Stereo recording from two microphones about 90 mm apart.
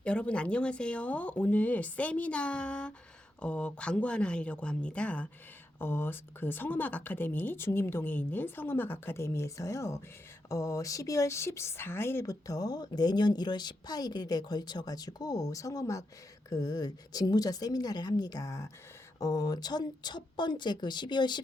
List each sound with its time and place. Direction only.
0.0 s speech: 10° left (ahead or behind); by 12.2 s 30° left (ahead or behind)
12.2 s a woman's voice: 40° left (ahead or behind); by 21.4 s 55° left (ahead or behind)